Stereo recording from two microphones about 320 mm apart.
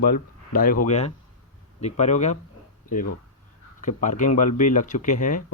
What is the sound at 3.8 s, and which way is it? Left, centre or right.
Speech, left.